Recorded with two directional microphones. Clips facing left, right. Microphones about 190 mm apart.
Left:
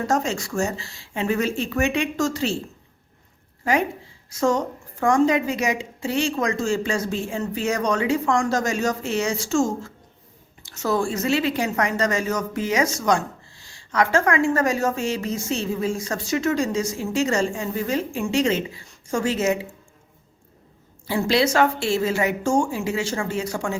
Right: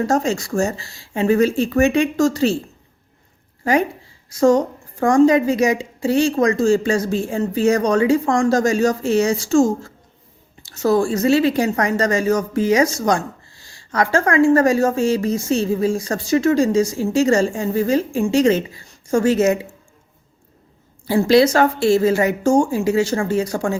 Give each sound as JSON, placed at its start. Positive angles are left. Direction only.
{"t": 0.1, "sound": "speech", "side_deg": -35}
{"t": 3.6, "sound": "speech", "side_deg": -35}
{"t": 21.1, "sound": "speech", "side_deg": -40}